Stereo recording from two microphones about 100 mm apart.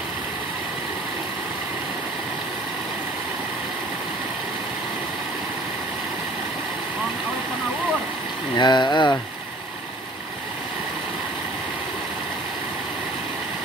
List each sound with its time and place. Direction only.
8.5 s speech: 50° left (ahead or behind)